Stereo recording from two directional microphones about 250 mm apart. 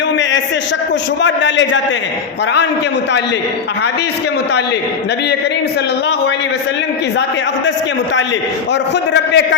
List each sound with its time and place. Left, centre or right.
1.2 s a man's voice: left
8.7 s a man's voice: left